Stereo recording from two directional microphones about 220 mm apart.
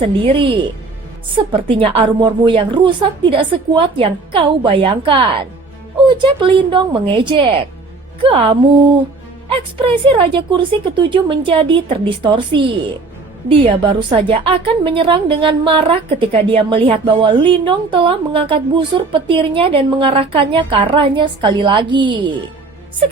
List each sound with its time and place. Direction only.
0.0 s a woman's voice: 25° right (ahead or behind)
1.6 s a woman's voice: 25° right (ahead or behind)